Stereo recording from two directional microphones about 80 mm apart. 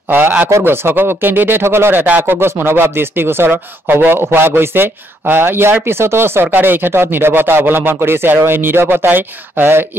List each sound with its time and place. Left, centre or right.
0.5 s speech: right